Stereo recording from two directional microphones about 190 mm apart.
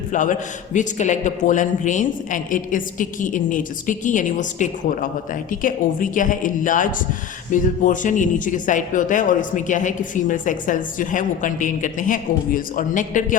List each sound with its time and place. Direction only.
0.1 s speech: 40° left (ahead or behind)